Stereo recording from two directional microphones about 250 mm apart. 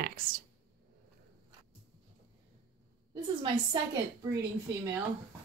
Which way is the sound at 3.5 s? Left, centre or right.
Centre.